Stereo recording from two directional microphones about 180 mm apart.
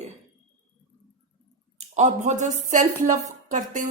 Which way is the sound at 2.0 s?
40° right (ahead or behind).